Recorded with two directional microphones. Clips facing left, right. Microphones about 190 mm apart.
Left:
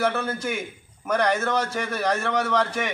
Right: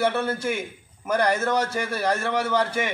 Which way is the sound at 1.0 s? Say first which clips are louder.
Even; 5° right (ahead or behind).